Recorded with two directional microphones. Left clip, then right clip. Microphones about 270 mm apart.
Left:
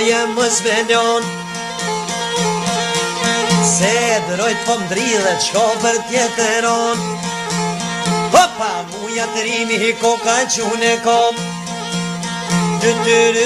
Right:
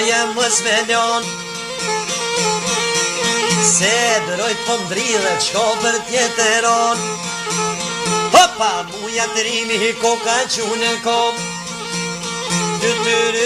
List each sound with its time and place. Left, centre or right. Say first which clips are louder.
0.0 s music: left 1 dB; centre
3.6 s music: even; centre
8.3 s music: right 1 dB; centre
12.8 s music: left 4 dB; centre